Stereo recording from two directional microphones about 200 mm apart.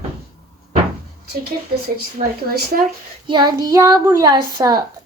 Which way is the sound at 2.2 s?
30° right (ahead or behind).